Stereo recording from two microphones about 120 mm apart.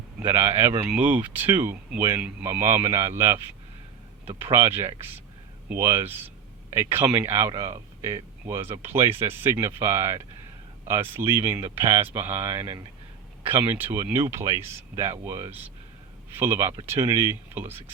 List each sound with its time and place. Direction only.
0.3 s speech: 20° right (ahead or behind)
4.5 s speech: 20° right (ahead or behind)
13.7 s speech: 15° right (ahead or behind)